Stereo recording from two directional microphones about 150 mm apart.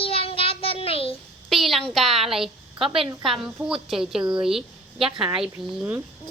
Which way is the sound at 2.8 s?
35° right (ahead or behind).